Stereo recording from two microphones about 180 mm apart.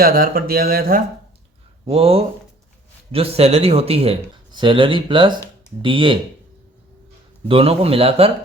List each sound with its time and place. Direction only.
0.0 s speech: 55° right (ahead or behind)
1.9 s speech: 35° right (ahead or behind)
7.4 s speech: 30° right (ahead or behind)